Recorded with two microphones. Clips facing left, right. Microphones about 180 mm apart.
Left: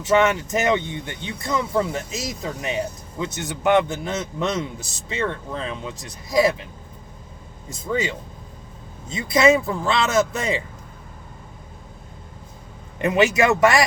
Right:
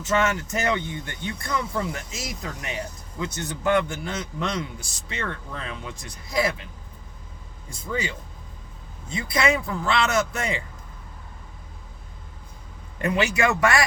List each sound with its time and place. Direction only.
0.0 s speech: 20° left (ahead or behind)
7.7 s speech: 20° left (ahead or behind)
13.0 s speech: 20° left (ahead or behind)